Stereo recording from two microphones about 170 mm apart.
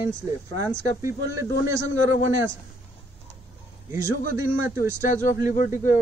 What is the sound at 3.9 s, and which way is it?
A man's voice, 15° right (ahead or behind).